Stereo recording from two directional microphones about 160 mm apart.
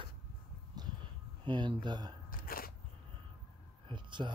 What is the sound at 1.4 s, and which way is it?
Speech, 30° right (ahead or behind).